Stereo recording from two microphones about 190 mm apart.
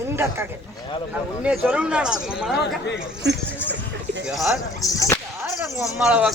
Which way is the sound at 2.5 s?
65° left (ahead or behind).